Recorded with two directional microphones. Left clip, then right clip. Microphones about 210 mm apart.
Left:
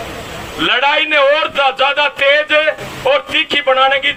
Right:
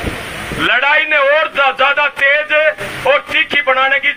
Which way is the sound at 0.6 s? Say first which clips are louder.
Right 1 dB; 50° left (ahead or behind).